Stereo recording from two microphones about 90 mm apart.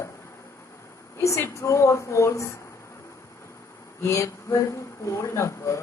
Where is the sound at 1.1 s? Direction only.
35° left (ahead or behind).